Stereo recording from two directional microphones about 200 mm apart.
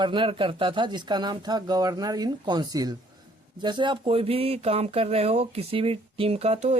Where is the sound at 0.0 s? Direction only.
25° right (ahead or behind).